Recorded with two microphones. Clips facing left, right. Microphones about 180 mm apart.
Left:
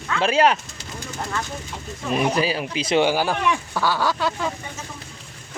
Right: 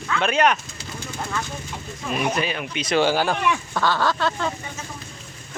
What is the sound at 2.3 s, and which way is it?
Speech, 35° left (ahead or behind).